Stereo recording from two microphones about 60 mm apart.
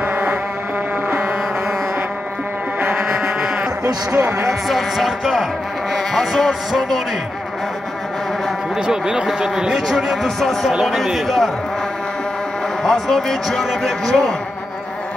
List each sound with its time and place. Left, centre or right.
0.0 s a sound: right
3.1 s a sound: centre
4.2 s speech: right
4.5 s music: centre
8.8 s speech: centre
9.8 s music: centre
12.8 s a man's voice: centre